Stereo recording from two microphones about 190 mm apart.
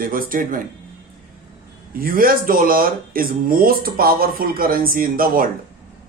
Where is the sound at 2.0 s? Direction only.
50° right (ahead or behind).